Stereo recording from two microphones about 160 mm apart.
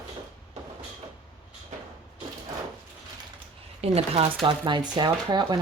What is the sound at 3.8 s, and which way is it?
Speech, 40° right (ahead or behind).